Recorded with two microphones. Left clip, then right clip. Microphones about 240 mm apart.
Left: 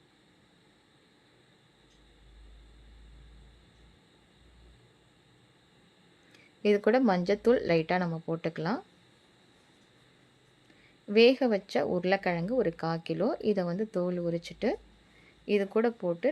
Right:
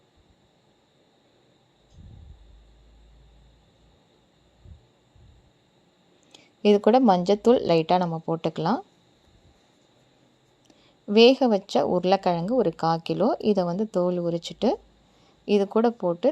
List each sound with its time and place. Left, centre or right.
6.3 s a woman's voice: centre
11.1 s a woman's voice: centre